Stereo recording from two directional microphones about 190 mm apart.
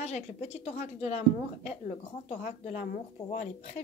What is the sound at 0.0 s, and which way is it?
Speech, 35° left (ahead or behind).